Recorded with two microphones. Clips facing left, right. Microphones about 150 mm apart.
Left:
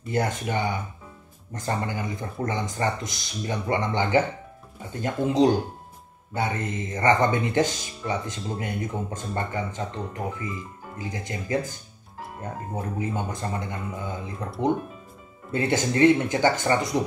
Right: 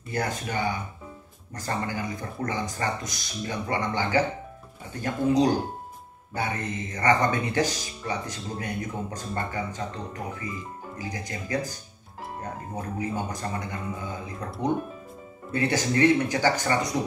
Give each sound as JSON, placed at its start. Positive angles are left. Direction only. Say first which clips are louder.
{"t": 0.1, "sound": "speech", "louder": "left 3 dB", "side_deg": 20}
{"t": 15.5, "sound": "speech", "louder": "left 1 dB", "side_deg": 20}